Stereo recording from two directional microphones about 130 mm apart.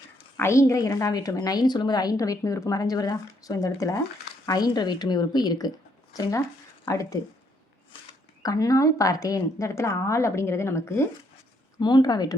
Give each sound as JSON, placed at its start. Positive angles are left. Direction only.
{"t": 0.3, "sound": "a woman's voice", "side_deg": 20}
{"t": 6.8, "sound": "a woman's voice", "side_deg": 25}
{"t": 8.4, "sound": "a woman's voice", "side_deg": 25}
{"t": 11.8, "sound": "a woman's voice", "side_deg": 35}